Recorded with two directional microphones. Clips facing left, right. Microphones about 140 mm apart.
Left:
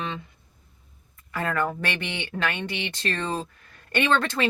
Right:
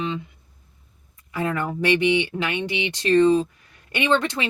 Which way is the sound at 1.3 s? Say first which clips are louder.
Right 1 dB; 15° right (ahead or behind).